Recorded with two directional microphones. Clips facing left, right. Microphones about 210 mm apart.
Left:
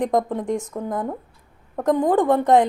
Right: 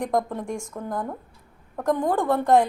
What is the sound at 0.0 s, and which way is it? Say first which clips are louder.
A woman's voice: left 4 dB; 20° left (ahead or behind).